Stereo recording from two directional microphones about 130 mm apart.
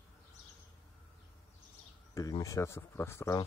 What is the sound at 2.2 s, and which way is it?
Speech, 30° left (ahead or behind).